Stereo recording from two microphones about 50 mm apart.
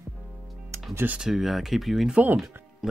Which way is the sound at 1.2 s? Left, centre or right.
Centre.